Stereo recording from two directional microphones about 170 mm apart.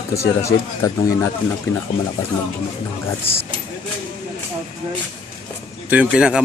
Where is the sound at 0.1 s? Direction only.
15° left (ahead or behind).